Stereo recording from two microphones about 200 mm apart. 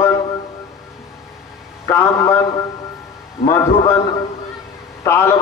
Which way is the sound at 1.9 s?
15° left (ahead or behind).